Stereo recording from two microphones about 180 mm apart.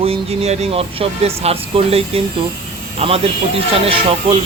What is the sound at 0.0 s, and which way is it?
Speech, 35° right (ahead or behind).